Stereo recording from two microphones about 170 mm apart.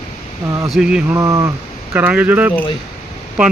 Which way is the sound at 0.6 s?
5° right (ahead or behind).